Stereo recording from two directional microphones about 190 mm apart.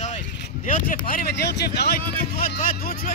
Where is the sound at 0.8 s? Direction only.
45° left (ahead or behind).